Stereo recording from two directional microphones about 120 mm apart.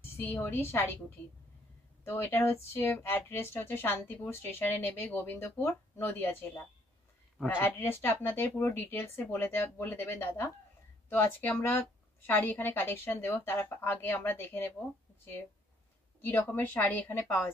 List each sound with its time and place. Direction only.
0.2 s speech: 15° left (ahead or behind)
2.0 s a woman's voice: 20° left (ahead or behind)
16.2 s a woman's voice: 15° left (ahead or behind)